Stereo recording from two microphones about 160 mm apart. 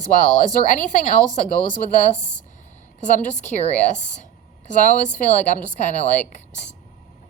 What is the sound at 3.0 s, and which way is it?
A woman's voice, 50° left (ahead or behind).